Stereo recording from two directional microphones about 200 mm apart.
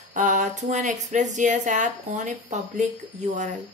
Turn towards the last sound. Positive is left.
turn(degrees=-35)  # may be behind; listen again after turning